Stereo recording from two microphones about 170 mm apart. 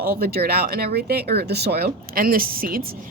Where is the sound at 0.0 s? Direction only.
60° right (ahead or behind).